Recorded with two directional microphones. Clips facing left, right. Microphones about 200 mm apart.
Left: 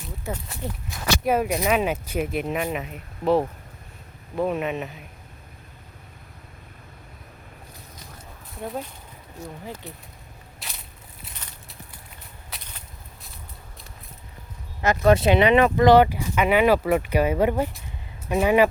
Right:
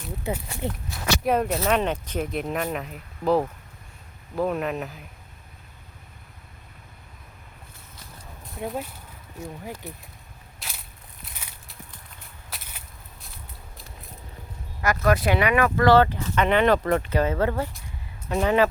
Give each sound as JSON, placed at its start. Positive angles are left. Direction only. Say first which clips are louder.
{"t": 0.6, "sound": "speech", "louder": "right 3 dB", "side_deg": -20}
{"t": 1.2, "sound": "speech", "louder": "left 1 dB", "side_deg": 5}
{"t": 1.5, "sound": "speech", "louder": "left 1 dB", "side_deg": 15}
{"t": 8.5, "sound": "speech", "louder": "right 1 dB", "side_deg": 0}
{"t": 10.6, "sound": "crushing", "louder": "even", "side_deg": 0}
{"t": 11.3, "sound": "a sound", "louder": "right 1 dB", "side_deg": -10}
{"t": 14.8, "sound": "speech", "louder": "left 4 dB", "side_deg": 25}